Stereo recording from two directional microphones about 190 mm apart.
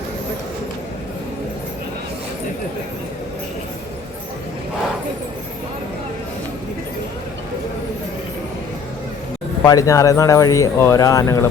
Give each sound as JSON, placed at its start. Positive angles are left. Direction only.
{"t": 9.6, "sound": "speech", "side_deg": 20}